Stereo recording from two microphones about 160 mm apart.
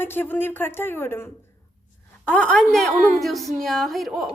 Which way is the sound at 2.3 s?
5° left (ahead or behind).